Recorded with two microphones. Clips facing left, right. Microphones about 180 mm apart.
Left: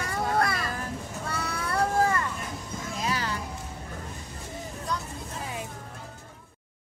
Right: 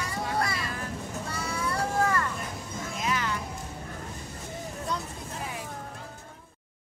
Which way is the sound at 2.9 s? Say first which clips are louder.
Even; 35° left (ahead or behind).